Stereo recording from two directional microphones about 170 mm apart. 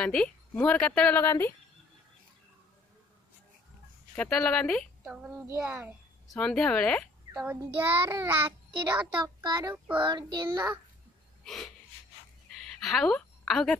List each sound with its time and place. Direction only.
0.0 s a woman's voice: 5° left (ahead or behind)
4.1 s a woman's voice: 5° left (ahead or behind); by 5.9 s 10° right (ahead or behind)
6.3 s a woman's voice: 5° left (ahead or behind)
7.3 s a child's voice: 10° right (ahead or behind)
9.2 s child singing: 25° right (ahead or behind)
9.6 s a child's voice: 10° right (ahead or behind)
10.0 s child singing: 25° right (ahead or behind)
11.4 s a woman's voice: 5° left (ahead or behind)
12.5 s a sound: centre (ahead or behind)